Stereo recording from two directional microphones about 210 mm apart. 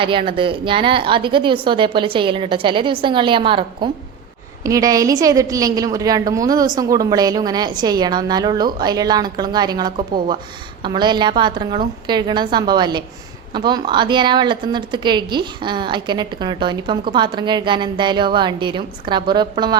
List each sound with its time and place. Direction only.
0.0 s a woman's voice: 25° right (ahead or behind)